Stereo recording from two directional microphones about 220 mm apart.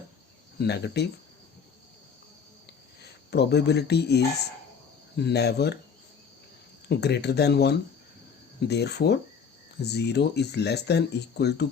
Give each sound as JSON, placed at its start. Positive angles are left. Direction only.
{"t": 0.6, "sound": "speech", "side_deg": 50}
{"t": 3.0, "sound": "speech", "side_deg": 50}
{"t": 6.8, "sound": "speech", "side_deg": 50}